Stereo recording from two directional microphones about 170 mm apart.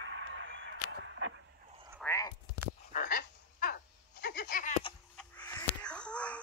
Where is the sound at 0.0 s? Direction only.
90° right.